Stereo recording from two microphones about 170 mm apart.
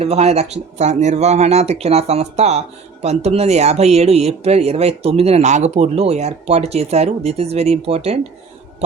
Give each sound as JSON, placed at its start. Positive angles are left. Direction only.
{"t": 0.0, "sound": "speech", "side_deg": -40}